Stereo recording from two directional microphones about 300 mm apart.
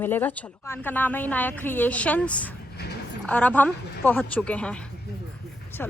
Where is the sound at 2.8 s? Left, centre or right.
Left.